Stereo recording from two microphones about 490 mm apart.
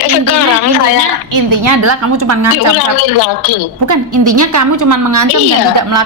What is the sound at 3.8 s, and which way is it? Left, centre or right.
Speech, right.